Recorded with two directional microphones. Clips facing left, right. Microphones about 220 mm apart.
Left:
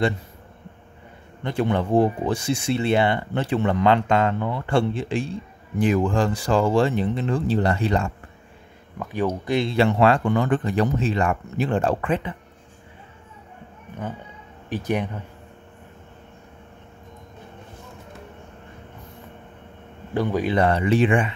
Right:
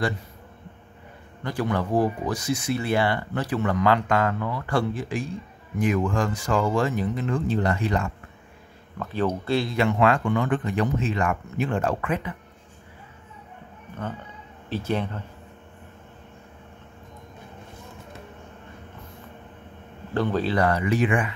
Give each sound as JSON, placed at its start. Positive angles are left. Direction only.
{"t": 1.4, "sound": "speech", "side_deg": 25}
{"t": 9.0, "sound": "speech", "side_deg": 10}
{"t": 9.7, "sound": "speech", "side_deg": 30}
{"t": 14.7, "sound": "speech", "side_deg": 15}
{"t": 20.2, "sound": "speech", "side_deg": 15}